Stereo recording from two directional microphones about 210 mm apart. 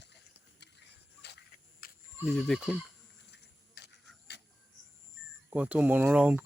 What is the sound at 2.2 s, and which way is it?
Speech, centre (ahead or behind).